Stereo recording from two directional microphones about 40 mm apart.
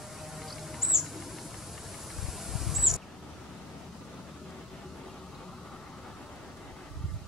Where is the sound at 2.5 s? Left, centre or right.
Centre.